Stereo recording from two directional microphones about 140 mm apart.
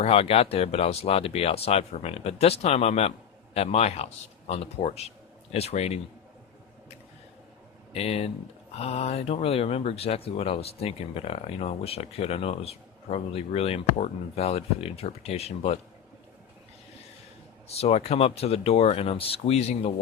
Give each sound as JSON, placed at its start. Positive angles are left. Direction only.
{"t": 0.0, "sound": "speech", "side_deg": 45}
{"t": 7.9, "sound": "speech", "side_deg": 45}
{"t": 17.7, "sound": "speech", "side_deg": 45}